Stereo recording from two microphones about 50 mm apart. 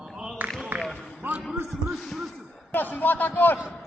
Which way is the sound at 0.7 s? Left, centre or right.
Right.